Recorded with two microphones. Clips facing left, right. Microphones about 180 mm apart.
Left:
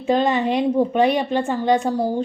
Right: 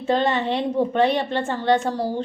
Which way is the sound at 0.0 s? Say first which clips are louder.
Left 2 dB; 15° left (ahead or behind).